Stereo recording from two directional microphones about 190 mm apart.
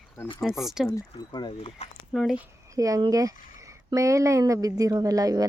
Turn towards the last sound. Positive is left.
turn(degrees=-20)  # may be behind; listen again after turning